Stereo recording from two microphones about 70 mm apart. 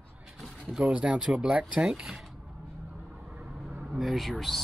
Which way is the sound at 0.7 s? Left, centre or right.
Centre.